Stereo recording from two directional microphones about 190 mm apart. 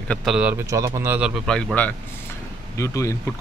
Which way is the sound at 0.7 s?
15° right (ahead or behind).